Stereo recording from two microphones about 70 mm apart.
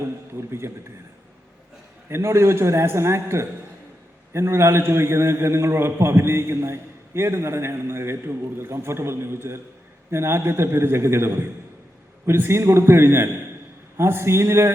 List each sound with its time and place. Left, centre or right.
0.3 s a man's voice: right
2.0 s a man's voice: right